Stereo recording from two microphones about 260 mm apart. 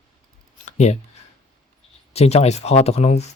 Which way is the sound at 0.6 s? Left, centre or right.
Left.